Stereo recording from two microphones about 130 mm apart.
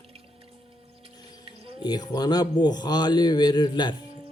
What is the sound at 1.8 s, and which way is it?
A man's voice, 30° left (ahead or behind).